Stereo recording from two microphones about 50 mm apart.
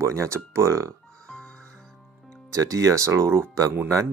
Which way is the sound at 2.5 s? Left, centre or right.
Right.